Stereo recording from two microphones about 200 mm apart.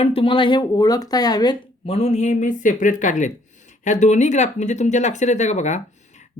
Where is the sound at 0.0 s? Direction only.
25° left (ahead or behind).